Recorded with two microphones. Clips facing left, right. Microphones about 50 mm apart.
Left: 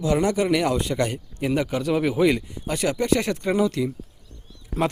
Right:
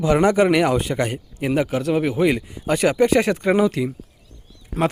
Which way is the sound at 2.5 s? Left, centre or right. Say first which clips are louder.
Right 6 dB; right.